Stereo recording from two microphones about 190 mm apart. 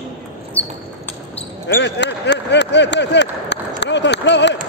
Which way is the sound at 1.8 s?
65° left (ahead or behind).